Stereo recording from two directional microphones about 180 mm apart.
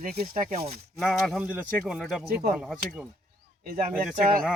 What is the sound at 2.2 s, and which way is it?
Speech, 60° right (ahead or behind).